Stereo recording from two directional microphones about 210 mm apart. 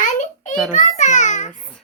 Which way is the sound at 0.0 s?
35° left (ahead or behind).